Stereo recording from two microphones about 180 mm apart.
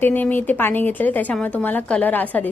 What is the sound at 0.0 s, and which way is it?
A woman's voice, 10° left (ahead or behind).